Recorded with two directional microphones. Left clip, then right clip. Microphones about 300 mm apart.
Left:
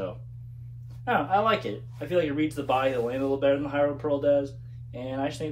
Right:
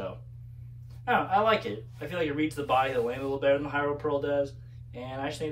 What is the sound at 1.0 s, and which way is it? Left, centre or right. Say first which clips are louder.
Speech: left 1 dB; centre.